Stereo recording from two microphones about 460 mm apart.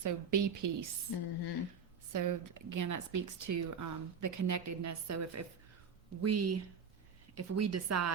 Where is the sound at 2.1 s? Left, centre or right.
Right.